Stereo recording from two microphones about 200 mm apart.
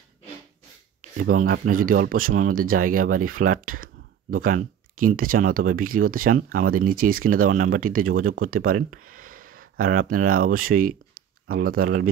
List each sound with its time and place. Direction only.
1.1 s speech: 45° right (ahead or behind)